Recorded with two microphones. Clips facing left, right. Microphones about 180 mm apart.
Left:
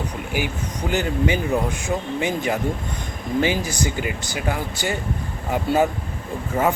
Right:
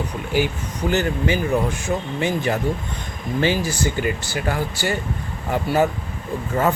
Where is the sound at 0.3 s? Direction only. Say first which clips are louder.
Right 5 dB; 15° left (ahead or behind).